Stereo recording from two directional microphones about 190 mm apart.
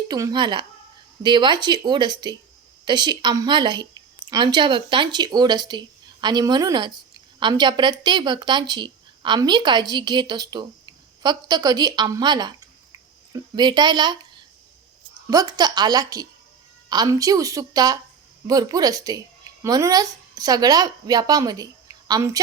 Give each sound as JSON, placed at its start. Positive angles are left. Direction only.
{"t": 0.1, "sound": "speech", "side_deg": -20}
{"t": 15.3, "sound": "a woman's voice", "side_deg": -20}